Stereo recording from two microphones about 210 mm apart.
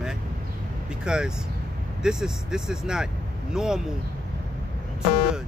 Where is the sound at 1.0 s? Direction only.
5° right (ahead or behind).